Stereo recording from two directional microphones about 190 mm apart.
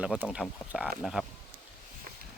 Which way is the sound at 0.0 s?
5° right (ahead or behind).